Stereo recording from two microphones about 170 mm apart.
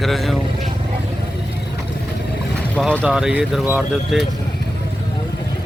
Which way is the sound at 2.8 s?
Centre (ahead or behind).